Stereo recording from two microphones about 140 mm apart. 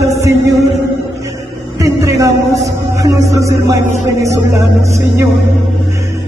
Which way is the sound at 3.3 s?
20° right (ahead or behind).